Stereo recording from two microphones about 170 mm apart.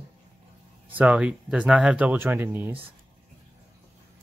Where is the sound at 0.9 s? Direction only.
10° right (ahead or behind).